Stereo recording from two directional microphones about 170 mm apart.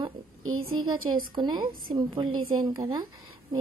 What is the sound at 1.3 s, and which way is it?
Speech, 25° right (ahead or behind).